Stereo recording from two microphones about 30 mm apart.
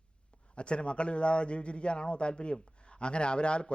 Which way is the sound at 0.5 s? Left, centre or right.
Left.